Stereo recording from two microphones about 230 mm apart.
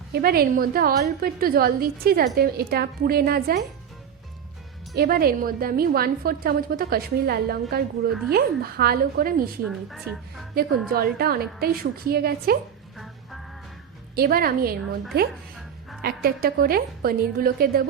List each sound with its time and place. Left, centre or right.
0.1 s a woman's voice: right
4.9 s a woman's voice: right
8.8 s a woman's voice: right
9.6 s a woman's voice: centre
10.5 s a woman's voice: right
14.2 s a woman's voice: right
16.0 s a woman's voice: right